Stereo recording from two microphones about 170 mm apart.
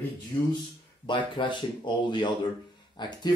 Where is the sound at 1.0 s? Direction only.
30° left (ahead or behind).